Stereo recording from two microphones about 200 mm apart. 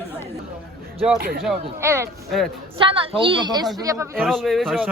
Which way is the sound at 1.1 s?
55° right (ahead or behind).